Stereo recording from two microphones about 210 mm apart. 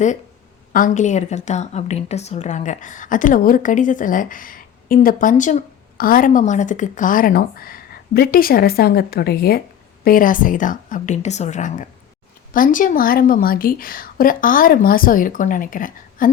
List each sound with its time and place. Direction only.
0.7 s a woman's voice: 40° left (ahead or behind)